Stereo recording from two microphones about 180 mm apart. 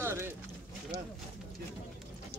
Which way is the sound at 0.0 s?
15° right (ahead or behind).